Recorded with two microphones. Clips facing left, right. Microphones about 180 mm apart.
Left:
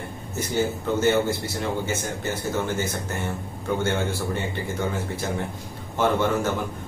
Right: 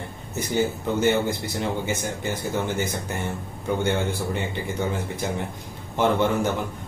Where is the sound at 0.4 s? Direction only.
15° right (ahead or behind).